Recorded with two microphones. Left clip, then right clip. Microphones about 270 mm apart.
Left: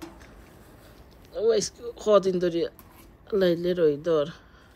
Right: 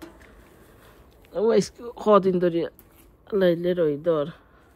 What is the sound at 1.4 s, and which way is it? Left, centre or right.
Speech, right.